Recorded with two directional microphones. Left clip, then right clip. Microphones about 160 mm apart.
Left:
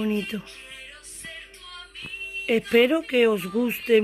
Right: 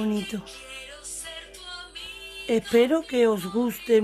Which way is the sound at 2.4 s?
Centre (ahead or behind).